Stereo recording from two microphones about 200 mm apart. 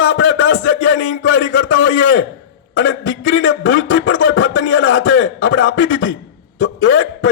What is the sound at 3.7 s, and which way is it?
A man's voice, 70° left (ahead or behind).